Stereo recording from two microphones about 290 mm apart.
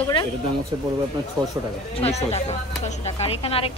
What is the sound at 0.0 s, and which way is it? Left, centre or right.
Speech, centre.